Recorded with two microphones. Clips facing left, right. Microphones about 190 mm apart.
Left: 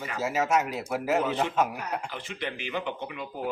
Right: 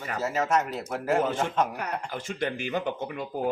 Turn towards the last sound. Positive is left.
turn(degrees=-45)  # may be behind; listen again after turning